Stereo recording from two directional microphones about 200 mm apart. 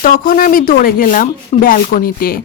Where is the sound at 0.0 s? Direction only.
45° left (ahead or behind).